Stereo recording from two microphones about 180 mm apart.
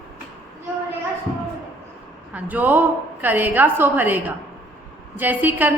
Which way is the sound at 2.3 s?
10° right (ahead or behind).